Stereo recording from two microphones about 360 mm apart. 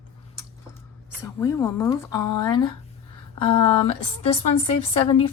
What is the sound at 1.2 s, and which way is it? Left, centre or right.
A woman's voice, centre.